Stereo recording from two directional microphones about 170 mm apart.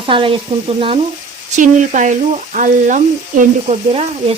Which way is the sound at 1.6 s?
45° right (ahead or behind).